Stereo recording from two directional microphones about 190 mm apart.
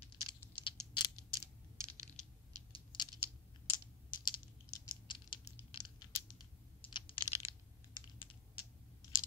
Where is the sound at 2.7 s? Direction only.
25° left (ahead or behind).